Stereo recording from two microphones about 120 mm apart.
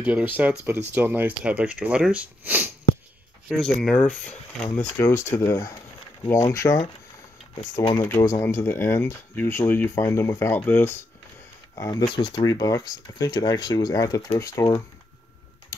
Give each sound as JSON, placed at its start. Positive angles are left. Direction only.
{"t": 0.0, "sound": "speech", "side_deg": -15}
{"t": 3.4, "sound": "speech", "side_deg": 0}
{"t": 8.0, "sound": "speech", "side_deg": 25}
{"t": 11.7, "sound": "speech", "side_deg": 30}